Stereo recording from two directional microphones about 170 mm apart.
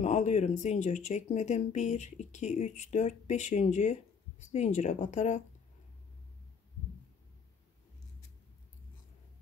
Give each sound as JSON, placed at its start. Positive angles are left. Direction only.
{"t": 0.0, "sound": "speech", "side_deg": 40}